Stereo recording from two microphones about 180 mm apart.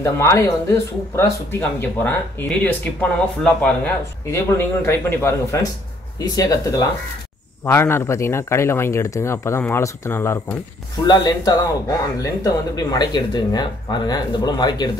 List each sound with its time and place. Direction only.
0.0 s speech: 15° left (ahead or behind)